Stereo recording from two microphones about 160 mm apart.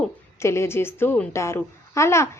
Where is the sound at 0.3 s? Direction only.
15° left (ahead or behind).